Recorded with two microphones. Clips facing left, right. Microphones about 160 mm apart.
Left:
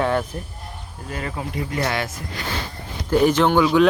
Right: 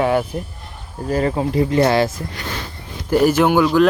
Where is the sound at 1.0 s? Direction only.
35° right (ahead or behind).